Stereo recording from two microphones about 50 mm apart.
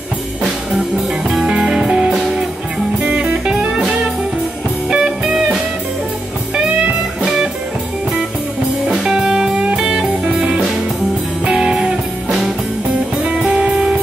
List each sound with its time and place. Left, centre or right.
1.4 s music: centre
8.9 s music: centre